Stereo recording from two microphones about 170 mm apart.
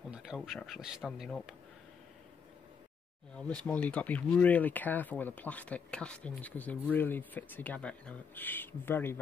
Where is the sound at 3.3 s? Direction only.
5° left (ahead or behind).